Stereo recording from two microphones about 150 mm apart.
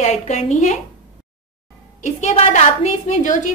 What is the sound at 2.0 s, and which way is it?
A woman's voice, 50° left (ahead or behind).